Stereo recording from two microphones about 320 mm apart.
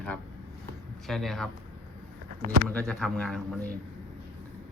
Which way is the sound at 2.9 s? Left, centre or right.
Centre.